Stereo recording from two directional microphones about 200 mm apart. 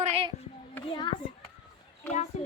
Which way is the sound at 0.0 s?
30° right (ahead or behind).